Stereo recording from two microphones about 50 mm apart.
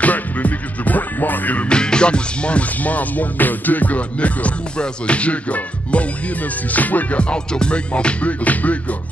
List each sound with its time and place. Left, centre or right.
0.0 s music: left
1.7 s music: centre